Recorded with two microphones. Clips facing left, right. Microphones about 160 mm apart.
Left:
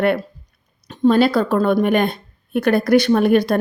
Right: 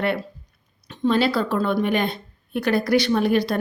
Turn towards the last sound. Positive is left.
turn(degrees=55)  # may be behind; listen again after turning